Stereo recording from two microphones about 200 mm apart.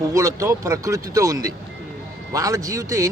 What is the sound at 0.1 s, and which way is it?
Speech, 15° right (ahead or behind).